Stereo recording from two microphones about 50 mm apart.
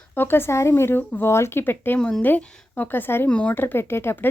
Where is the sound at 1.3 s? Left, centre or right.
Left.